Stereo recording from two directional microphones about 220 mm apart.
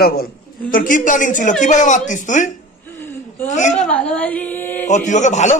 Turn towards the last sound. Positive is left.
turn(degrees=35)  # may be behind; listen again after turning